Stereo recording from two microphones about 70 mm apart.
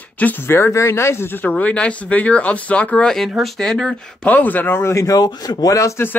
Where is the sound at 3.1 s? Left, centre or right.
Centre.